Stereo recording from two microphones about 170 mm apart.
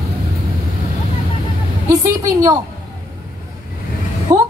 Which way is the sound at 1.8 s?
20° right (ahead or behind).